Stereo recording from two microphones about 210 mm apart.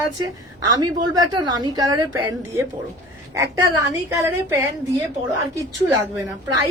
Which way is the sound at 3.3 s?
15° right (ahead or behind).